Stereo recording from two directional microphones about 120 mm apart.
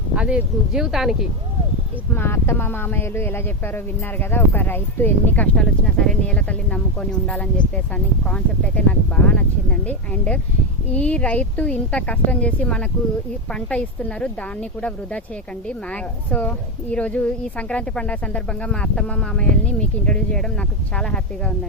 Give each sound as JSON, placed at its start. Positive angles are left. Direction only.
{"t": 0.1, "sound": "speech", "side_deg": -10}
{"t": 2.1, "sound": "speech", "side_deg": 20}